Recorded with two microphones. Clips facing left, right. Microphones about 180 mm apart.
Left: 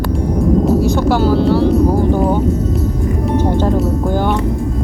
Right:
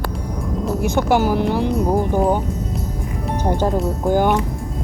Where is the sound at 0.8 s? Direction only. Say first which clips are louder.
Left 3 dB; 20° right (ahead or behind).